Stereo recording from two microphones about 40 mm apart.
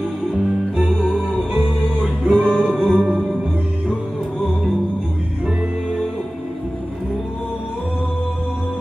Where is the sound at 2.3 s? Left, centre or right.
Right.